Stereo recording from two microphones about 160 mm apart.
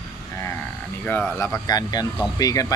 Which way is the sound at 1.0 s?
15° left (ahead or behind).